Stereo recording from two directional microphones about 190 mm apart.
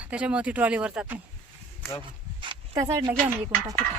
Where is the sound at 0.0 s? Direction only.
5° right (ahead or behind).